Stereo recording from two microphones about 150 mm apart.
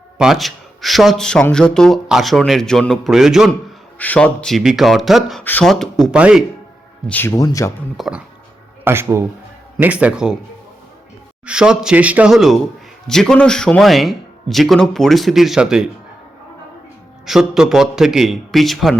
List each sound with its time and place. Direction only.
0.2 s a man's voice: centre (ahead or behind)
3.9 s a man's voice: 10° left (ahead or behind)
5.4 s a man's voice: 10° left (ahead or behind); by 6.4 s 5° right (ahead or behind)
7.1 s speech: 15° left (ahead or behind)
7.9 s a man's voice: centre (ahead or behind)
8.8 s speech: 15° right (ahead or behind)
11.4 s a man's voice: 5° right (ahead or behind)
17.2 s a man's voice: 5° right (ahead or behind)